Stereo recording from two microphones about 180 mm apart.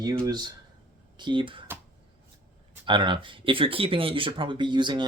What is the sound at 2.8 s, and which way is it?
Speech, 25° right (ahead or behind).